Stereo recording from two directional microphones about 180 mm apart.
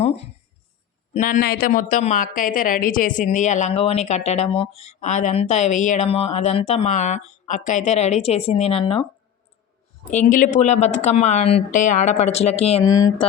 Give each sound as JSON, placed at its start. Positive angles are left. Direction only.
{"t": 0.0, "sound": "a sound", "side_deg": 35}
{"t": 1.1, "sound": "a woman's voice", "side_deg": 45}
{"t": 10.1, "sound": "a woman's voice", "side_deg": 45}
{"t": 12.8, "sound": "speech", "side_deg": 20}